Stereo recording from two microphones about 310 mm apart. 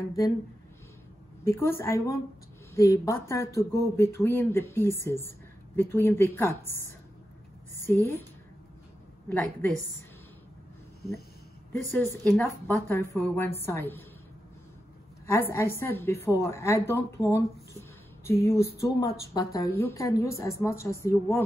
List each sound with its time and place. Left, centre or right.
1.4 s a woman's voice: centre
7.8 s a woman's voice: centre
9.3 s a woman's voice: centre
11.8 s a woman's voice: centre
15.2 s a woman's voice: centre